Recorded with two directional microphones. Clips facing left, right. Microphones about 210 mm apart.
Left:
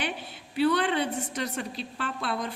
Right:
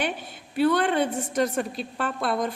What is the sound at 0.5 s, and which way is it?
A woman's voice, 50° right (ahead or behind).